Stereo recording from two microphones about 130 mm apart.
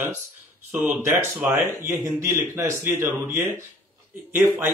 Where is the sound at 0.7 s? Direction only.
15° right (ahead or behind).